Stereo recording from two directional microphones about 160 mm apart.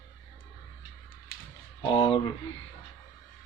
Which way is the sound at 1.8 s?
40° left (ahead or behind).